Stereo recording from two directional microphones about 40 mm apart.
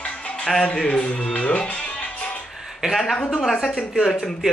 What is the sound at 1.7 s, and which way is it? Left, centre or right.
Music, left.